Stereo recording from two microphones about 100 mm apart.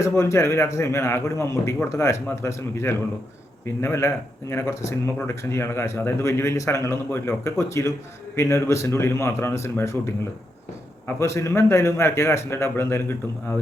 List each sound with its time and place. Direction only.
0.0 s a man's voice: 30° left (ahead or behind)
11.0 s a man's voice: 30° left (ahead or behind)